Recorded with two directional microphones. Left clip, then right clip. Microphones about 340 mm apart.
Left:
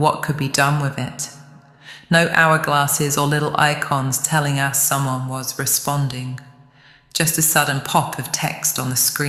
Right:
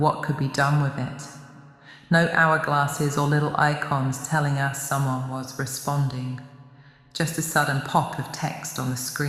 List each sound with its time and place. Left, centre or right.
0.0 s speech: left